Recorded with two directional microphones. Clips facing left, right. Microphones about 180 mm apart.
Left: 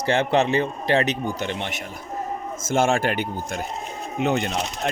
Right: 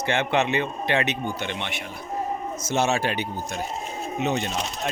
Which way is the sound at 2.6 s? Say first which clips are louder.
Left 3 dB; 50° left (ahead or behind).